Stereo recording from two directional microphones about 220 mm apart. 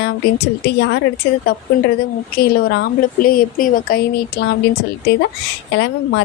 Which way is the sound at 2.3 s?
45° left (ahead or behind).